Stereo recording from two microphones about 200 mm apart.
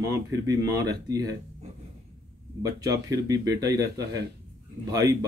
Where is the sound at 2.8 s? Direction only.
15° right (ahead or behind).